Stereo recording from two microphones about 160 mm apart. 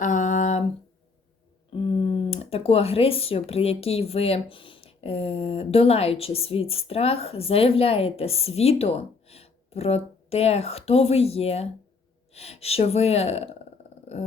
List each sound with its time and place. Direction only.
0.0 s humming: 55° left (ahead or behind)
1.7 s speech: 35° left (ahead or behind)